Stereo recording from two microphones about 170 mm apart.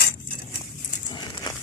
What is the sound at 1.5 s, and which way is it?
Crumpling, 25° left (ahead or behind).